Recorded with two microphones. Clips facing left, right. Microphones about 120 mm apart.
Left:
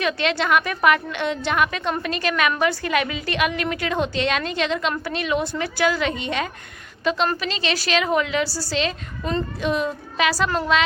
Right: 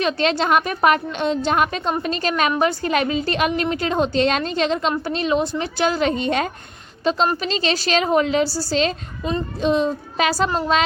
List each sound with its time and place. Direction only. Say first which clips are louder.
0.0 s a woman's voice: right 3 dB; 35° right (ahead or behind)
9.6 s child singing: right 4 dB; 30° right (ahead or behind)
10.3 s a woman's voice: right 2 dB; 30° right (ahead or behind)